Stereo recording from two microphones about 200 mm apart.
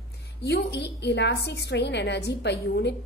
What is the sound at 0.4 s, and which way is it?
A woman's voice, 55° left (ahead or behind).